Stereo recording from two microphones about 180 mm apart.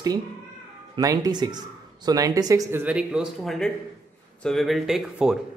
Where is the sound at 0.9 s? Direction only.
20° right (ahead or behind); by 5.4 s 5° right (ahead or behind).